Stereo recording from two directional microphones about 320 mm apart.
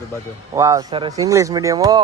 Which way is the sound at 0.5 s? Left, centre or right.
Centre.